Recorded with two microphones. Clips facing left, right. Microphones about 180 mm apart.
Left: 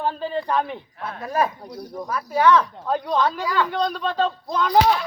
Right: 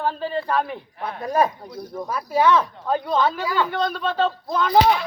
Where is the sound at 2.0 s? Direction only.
10° right (ahead or behind).